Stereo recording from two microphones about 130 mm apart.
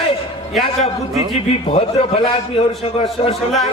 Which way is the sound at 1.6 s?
45° left (ahead or behind).